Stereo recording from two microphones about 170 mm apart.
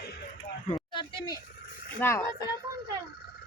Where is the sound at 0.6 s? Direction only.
30° left (ahead or behind).